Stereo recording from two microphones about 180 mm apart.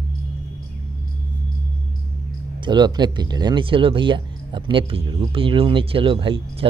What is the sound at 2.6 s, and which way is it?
Speech, 25° right (ahead or behind).